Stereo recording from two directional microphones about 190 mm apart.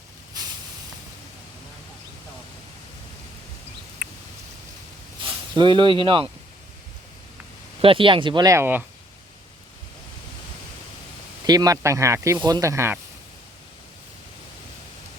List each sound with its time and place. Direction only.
0.4 s vehicle: 20° right (ahead or behind)
4.0 s a sound: 5° right (ahead or behind)
5.2 s speech: 25° right (ahead or behind)
7.8 s speech: 30° right (ahead or behind); by 8.8 s 10° right (ahead or behind)
11.4 s speech: 20° right (ahead or behind)